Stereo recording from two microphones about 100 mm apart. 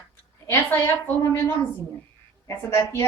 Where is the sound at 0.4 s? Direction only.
20° left (ahead or behind).